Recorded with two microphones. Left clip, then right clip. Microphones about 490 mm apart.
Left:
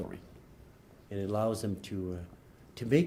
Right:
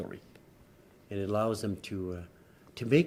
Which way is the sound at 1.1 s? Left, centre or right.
Right.